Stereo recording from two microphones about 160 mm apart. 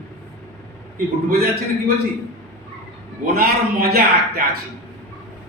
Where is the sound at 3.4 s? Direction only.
75° right (ahead or behind).